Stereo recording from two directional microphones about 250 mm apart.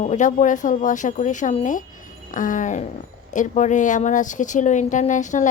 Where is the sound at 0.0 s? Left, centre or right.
Left.